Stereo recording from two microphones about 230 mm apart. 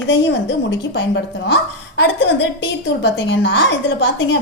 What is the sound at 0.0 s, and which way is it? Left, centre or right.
A woman's voice, left.